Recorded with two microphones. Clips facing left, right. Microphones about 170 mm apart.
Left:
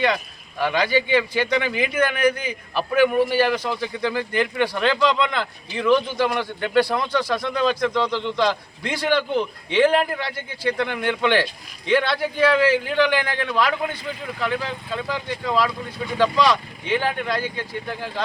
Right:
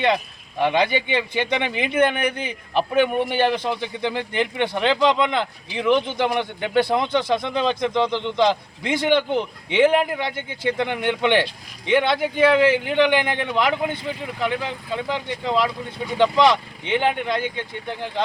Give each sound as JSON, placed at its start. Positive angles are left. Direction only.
{"t": 0.6, "sound": "speech", "side_deg": -25}